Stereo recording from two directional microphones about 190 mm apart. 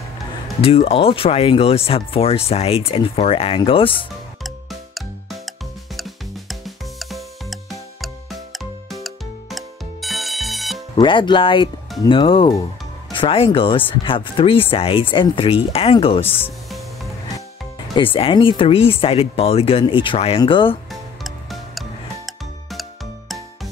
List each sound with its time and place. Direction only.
0.6 s speech: 30° left (ahead or behind)
4.4 s music: centre (ahead or behind)
5.9 s drum kit: centre (ahead or behind)
8.0 s music: centre (ahead or behind)
11.0 s speech: 25° left (ahead or behind)
16.3 s speech: 10° left (ahead or behind)
17.9 s speech: 30° left (ahead or behind)
20.9 s music: centre (ahead or behind)